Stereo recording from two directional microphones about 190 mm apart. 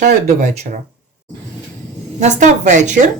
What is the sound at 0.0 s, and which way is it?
Speech, 40° right (ahead or behind).